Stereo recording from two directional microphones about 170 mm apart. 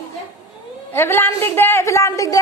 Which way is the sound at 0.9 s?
15° left (ahead or behind).